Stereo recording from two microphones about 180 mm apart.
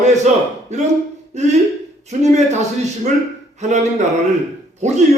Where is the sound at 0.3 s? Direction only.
40° right (ahead or behind).